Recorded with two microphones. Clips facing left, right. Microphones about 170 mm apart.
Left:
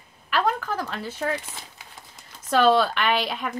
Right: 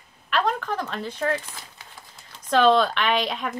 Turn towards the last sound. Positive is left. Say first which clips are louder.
# even
turn(degrees=5)  # may be behind; listen again after turning